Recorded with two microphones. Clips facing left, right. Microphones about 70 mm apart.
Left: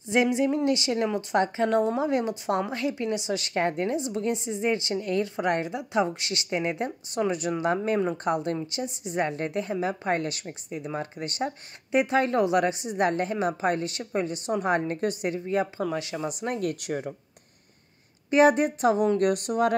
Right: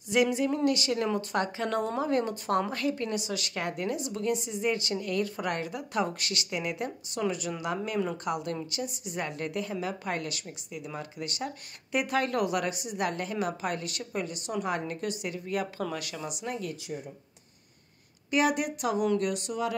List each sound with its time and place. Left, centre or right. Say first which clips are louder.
0.1 s a woman's voice: left 3 dB; left
16.8 s speech: left 7 dB; left
18.3 s a woman's voice: left 7 dB; left